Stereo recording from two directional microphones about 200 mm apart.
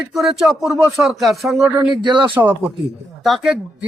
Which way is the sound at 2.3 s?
10° right (ahead or behind).